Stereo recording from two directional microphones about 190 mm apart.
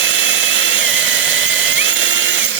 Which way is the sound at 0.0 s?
75° right (ahead or behind).